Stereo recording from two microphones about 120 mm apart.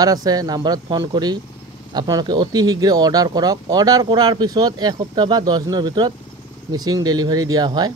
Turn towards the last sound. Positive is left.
turn(degrees=-35)  # may be behind; listen again after turning